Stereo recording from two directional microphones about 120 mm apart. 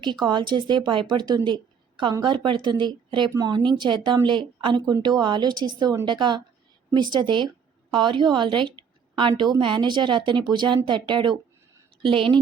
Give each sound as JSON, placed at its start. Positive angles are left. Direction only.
{"t": 0.0, "sound": "a woman's voice", "side_deg": -40}